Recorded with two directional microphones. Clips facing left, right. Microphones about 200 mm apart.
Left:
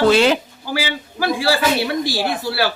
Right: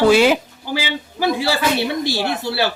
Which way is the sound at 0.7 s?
20° right (ahead or behind).